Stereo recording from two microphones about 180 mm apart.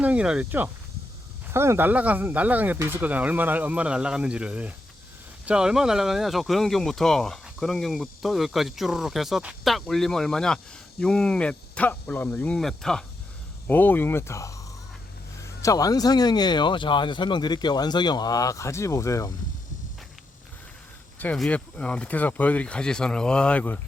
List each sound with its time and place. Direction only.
0.0 s speech: 5° right (ahead or behind); by 19.3 s 15° left (ahead or behind)
21.2 s speech: 5° left (ahead or behind)